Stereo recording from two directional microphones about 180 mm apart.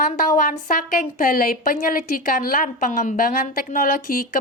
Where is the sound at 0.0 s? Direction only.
45° left (ahead or behind).